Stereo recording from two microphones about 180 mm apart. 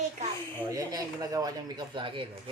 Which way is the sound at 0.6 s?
20° right (ahead or behind).